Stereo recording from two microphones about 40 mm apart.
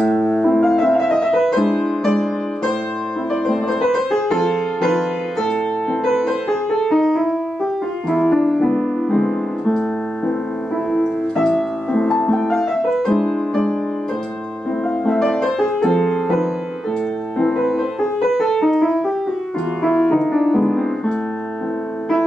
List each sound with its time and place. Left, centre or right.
0.0 s music: centre
6.0 s music: centre
15.0 s music: centre
15.9 s music: centre
17.6 s music: centre